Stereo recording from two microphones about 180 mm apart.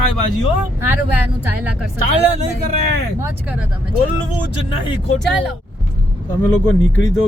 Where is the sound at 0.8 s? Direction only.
10° right (ahead or behind).